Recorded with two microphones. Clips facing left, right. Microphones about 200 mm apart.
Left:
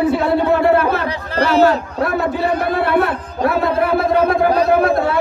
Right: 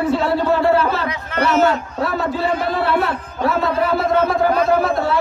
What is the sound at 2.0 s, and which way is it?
A man's voice, 60° left (ahead or behind).